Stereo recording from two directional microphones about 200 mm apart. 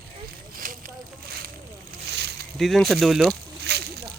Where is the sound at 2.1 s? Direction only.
55° right (ahead or behind).